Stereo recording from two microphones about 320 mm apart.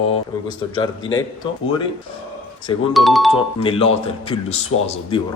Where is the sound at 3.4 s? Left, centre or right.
Centre.